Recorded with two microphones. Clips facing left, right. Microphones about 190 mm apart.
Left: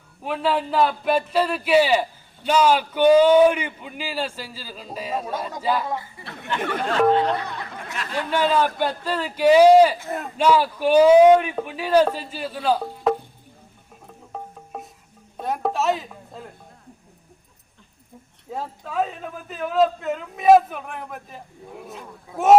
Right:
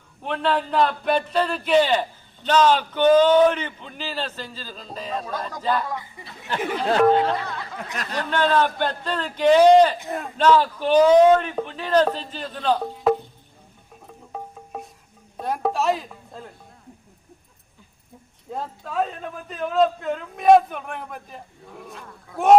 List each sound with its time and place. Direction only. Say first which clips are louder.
0.2 s a man's voice: even; 5° left (ahead or behind)
6.2 s speech: right 1 dB; 65° left (ahead or behind)
7.0 s a man's voice: even; centre (ahead or behind)
8.3 s a man's voice: even; 10° left (ahead or behind)
14.3 s music: right 1 dB; centre (ahead or behind)
15.4 s a woman's voice: even; centre (ahead or behind)
18.5 s a man's voice: even; centre (ahead or behind)